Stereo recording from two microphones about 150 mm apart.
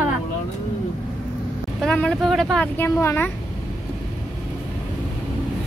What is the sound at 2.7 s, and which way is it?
Speech, 15° left (ahead or behind).